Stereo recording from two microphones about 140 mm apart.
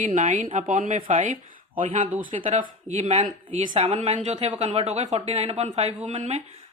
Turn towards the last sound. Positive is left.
turn(degrees=-55)  # may be behind; listen again after turning